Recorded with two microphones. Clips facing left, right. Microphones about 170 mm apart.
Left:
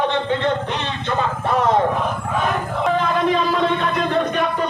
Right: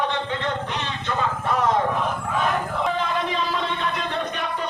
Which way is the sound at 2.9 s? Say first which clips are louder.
Left 6 dB; 50° left (ahead or behind).